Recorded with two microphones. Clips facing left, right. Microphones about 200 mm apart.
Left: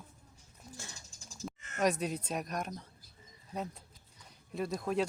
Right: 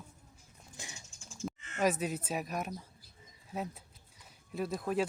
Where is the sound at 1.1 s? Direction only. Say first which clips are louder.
Right 1 dB; 35° left (ahead or behind).